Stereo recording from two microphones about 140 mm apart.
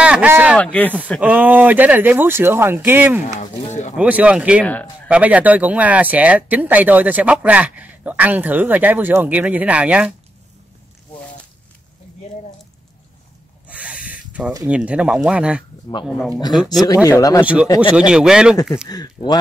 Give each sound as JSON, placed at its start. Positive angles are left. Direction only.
{"t": 0.0, "sound": "speech", "side_deg": -10}
{"t": 0.6, "sound": "speech", "side_deg": 10}
{"t": 1.2, "sound": "speech", "side_deg": -10}
{"t": 3.3, "sound": "speech", "side_deg": 55}
{"t": 3.9, "sound": "speech", "side_deg": -10}
{"t": 13.7, "sound": "a sound", "side_deg": -10}
{"t": 14.7, "sound": "speech", "side_deg": -10}
{"t": 16.8, "sound": "speech", "side_deg": 25}
{"t": 17.9, "sound": "speech", "side_deg": -5}
{"t": 18.9, "sound": "speech", "side_deg": 30}